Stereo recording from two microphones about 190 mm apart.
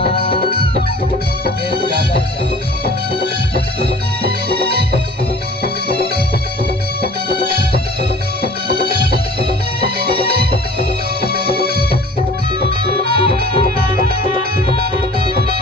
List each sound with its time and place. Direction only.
0.0 s chicken: 30° left (ahead or behind)
1.7 s music: 55° right (ahead or behind)
3.5 s music: 55° right (ahead or behind)
7.0 s music: 50° right (ahead or behind)
13.7 s music: 50° left (ahead or behind)